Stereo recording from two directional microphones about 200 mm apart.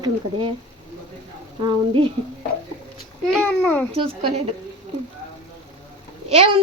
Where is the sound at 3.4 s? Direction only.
10° left (ahead or behind).